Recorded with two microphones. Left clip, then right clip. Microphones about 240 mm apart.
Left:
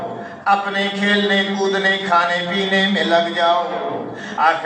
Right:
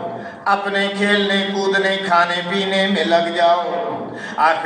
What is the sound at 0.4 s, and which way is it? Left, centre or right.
A man's voice, right.